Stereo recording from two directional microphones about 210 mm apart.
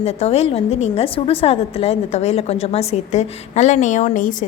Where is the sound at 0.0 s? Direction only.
30° left (ahead or behind).